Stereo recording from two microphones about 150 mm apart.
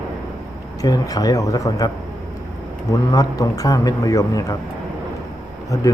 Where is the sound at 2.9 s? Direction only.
25° left (ahead or behind).